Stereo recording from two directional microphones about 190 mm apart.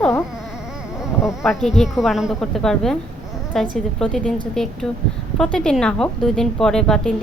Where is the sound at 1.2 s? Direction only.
Centre (ahead or behind).